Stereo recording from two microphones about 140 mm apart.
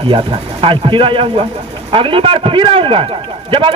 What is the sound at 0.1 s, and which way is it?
A man's voice, 35° right (ahead or behind).